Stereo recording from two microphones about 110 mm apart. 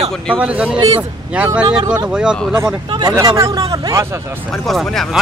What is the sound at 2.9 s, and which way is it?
Speech, 35° right (ahead or behind).